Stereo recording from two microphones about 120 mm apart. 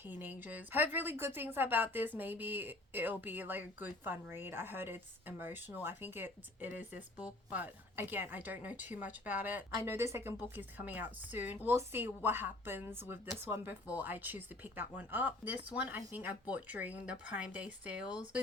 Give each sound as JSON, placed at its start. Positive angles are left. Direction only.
{"t": 0.0, "sound": "a woman's voice", "side_deg": -15}